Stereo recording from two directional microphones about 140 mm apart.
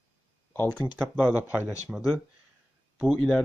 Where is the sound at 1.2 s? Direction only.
15° right (ahead or behind).